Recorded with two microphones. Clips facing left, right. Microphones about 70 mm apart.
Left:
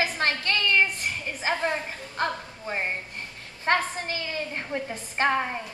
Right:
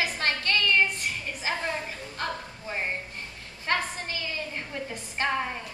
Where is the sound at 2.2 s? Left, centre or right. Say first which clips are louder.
Left 5 dB; left.